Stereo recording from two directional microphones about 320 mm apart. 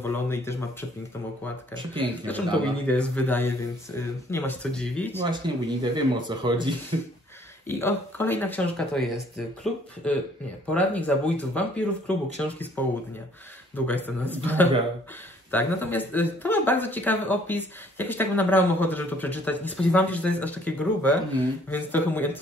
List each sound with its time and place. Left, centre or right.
0.0 s speech: centre
2.2 s speech: centre
5.3 s speech: centre
7.6 s speech: centre
13.7 s speech: centre